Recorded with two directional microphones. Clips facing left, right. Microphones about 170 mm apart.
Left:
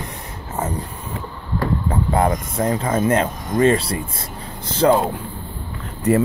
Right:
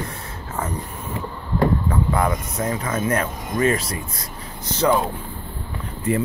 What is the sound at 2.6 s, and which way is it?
Speech, 30° left (ahead or behind).